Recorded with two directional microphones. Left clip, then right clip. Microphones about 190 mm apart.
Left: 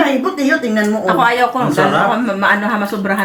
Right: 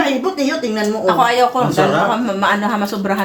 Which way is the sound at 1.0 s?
5° right (ahead or behind).